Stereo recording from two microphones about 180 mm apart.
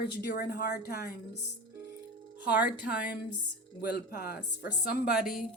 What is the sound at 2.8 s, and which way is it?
Speech, 60° left (ahead or behind).